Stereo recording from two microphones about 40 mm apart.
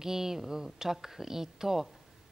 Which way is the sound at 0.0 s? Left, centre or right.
Centre.